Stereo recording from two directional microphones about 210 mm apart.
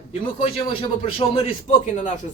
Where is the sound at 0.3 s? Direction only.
25° left (ahead or behind).